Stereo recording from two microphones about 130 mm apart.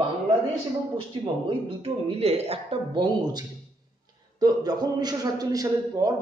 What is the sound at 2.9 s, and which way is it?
A man's voice, 35° right (ahead or behind).